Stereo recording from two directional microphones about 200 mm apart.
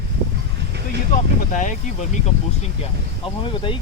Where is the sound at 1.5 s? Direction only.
40° left (ahead or behind).